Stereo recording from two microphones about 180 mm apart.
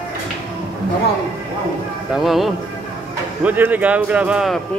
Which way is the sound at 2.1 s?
Centre (ahead or behind).